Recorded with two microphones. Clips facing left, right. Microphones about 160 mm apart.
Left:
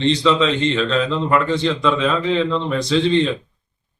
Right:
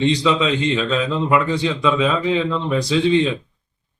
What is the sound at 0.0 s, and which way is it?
A man's voice, 10° right (ahead or behind).